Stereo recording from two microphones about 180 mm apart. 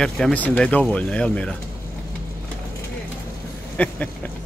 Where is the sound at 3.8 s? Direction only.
10° left (ahead or behind).